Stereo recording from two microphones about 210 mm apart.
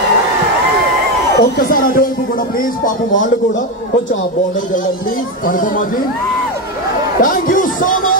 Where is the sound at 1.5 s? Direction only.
40° left (ahead or behind).